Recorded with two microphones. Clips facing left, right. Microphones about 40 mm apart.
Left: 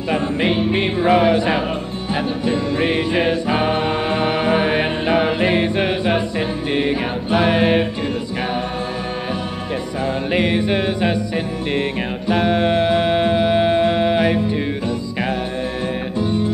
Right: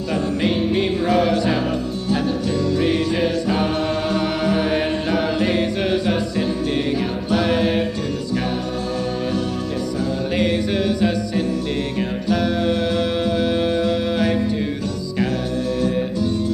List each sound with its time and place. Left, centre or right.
0.1 s music: left
10.3 s music: left
15.8 s music: left